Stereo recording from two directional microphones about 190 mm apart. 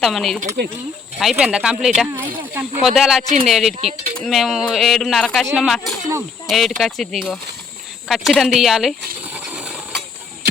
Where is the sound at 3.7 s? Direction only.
35° right (ahead or behind).